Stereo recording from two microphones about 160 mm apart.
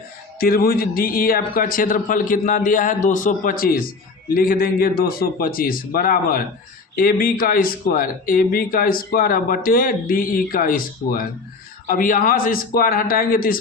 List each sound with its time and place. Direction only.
0.3 s speech: 70° left (ahead or behind)